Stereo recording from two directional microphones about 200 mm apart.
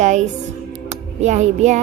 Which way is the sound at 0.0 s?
35° right (ahead or behind).